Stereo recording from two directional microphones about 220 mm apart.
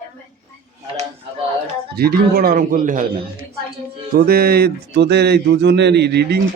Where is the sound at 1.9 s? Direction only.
45° right (ahead or behind).